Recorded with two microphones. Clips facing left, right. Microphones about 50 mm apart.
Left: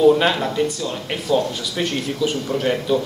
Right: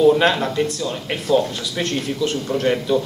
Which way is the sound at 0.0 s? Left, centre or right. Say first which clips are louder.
Even; centre.